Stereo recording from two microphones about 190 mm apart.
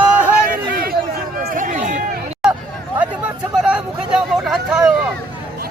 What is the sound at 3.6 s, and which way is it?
Hubbub, 5° right (ahead or behind).